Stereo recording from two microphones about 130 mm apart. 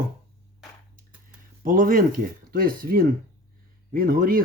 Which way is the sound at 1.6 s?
90° right.